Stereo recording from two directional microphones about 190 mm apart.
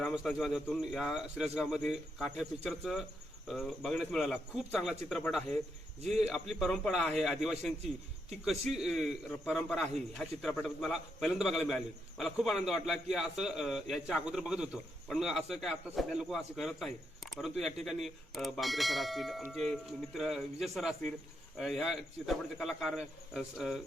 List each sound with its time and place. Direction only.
0.0 s a man's voice: centre (ahead or behind)